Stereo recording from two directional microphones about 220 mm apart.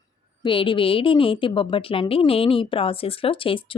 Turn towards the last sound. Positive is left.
turn(degrees=25)  # may be behind; listen again after turning